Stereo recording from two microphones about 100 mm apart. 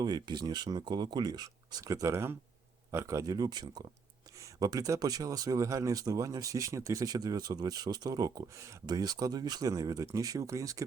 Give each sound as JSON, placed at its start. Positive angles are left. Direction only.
{"t": 0.0, "sound": "speech", "side_deg": -45}
{"t": 8.9, "sound": "speech", "side_deg": -40}